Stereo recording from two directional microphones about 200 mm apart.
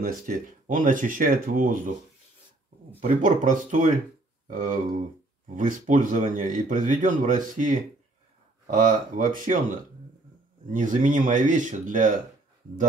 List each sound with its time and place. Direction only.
0.0 s speech: 45° right (ahead or behind)
3.0 s speech: 40° right (ahead or behind)